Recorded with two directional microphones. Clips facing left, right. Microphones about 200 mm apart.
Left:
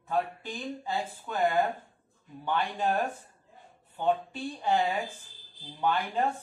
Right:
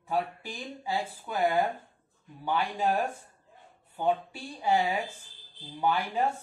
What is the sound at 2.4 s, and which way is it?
A woman's voice, 10° right (ahead or behind).